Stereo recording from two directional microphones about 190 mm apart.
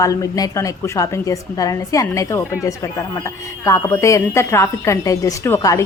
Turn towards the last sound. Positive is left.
turn(degrees=15)  # may be behind; listen again after turning